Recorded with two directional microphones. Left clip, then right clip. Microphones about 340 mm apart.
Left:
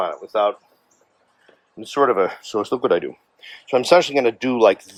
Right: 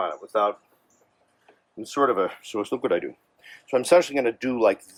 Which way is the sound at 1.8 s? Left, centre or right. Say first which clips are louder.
Left 5 dB; centre.